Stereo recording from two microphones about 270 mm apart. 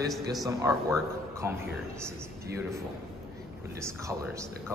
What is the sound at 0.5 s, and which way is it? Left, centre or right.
Speech, centre.